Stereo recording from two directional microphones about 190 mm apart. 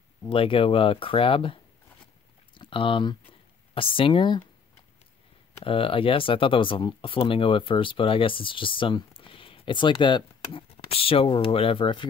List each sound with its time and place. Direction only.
0.3 s speech: 30° left (ahead or behind)
5.6 s speech: 30° left (ahead or behind)